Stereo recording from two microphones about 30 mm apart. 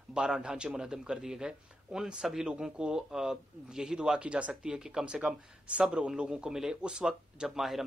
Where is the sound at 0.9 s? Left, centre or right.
Right.